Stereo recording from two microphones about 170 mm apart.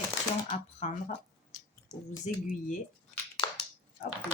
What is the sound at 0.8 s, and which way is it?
Speech, 40° left (ahead or behind).